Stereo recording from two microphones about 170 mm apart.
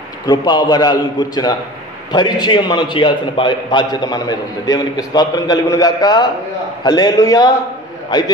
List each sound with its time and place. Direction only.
0.3 s a man's voice: 25° left (ahead or behind)